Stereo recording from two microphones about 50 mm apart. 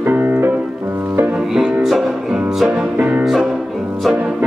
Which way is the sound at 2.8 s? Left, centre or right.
Right.